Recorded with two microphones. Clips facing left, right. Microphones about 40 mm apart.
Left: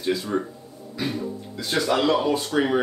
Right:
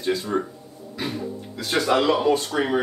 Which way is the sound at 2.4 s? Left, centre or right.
Centre.